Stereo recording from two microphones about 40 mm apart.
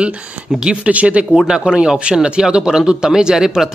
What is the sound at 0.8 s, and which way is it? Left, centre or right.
Speech, right.